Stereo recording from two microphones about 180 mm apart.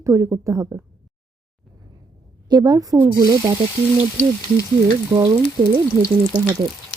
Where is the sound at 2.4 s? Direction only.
20° right (ahead or behind).